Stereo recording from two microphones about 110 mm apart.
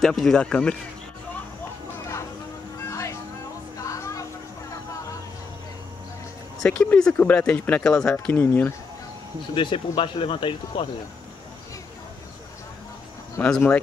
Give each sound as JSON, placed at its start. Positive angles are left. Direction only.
{"t": 0.0, "sound": "speech", "side_deg": 5}
{"t": 2.9, "sound": "vehicle", "side_deg": 30}
{"t": 6.6, "sound": "speech", "side_deg": 10}
{"t": 8.4, "sound": "speech", "side_deg": 20}
{"t": 9.6, "sound": "speech", "side_deg": 50}
{"t": 13.4, "sound": "speech", "side_deg": 10}